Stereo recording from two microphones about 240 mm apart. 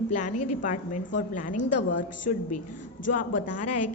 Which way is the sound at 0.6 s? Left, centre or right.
Left.